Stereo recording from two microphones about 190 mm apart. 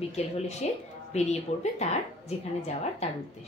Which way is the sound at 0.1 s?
35° left (ahead or behind).